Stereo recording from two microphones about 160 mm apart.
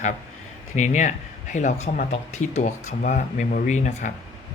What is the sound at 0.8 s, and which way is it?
Speech, 50° left (ahead or behind).